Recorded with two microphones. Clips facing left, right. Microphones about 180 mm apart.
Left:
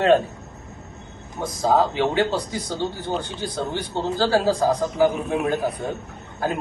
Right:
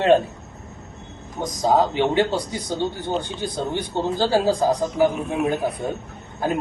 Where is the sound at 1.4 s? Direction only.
20° right (ahead or behind).